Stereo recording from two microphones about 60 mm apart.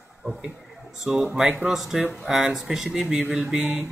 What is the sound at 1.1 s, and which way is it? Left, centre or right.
Speech, centre.